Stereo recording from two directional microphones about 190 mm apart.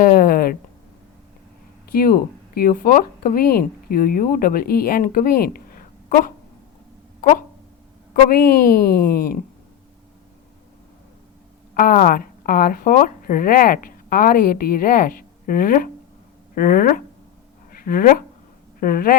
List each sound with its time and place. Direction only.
0.0 s a sound: 50° left (ahead or behind)
1.9 s speech: 50° left (ahead or behind)
8.1 s speech: 50° left (ahead or behind)
11.7 s speech: 50° left (ahead or behind)
17.7 s a sound: 50° left (ahead or behind)
18.8 s speech: 50° left (ahead or behind)